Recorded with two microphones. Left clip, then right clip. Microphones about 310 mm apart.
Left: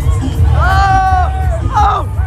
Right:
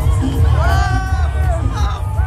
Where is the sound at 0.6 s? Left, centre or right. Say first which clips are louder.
Left 11 dB; centre.